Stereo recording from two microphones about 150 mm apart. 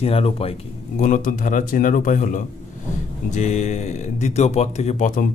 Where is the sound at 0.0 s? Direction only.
40° left (ahead or behind).